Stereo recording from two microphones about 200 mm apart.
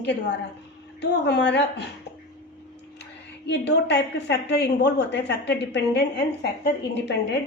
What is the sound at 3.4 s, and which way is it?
A woman's voice, 60° left (ahead or behind).